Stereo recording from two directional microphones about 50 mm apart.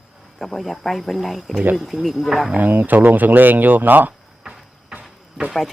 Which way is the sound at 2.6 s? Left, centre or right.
Right.